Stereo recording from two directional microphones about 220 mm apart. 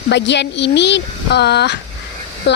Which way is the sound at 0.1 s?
50° left (ahead or behind).